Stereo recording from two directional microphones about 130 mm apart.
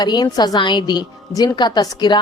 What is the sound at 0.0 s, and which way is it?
A woman's voice, 30° left (ahead or behind).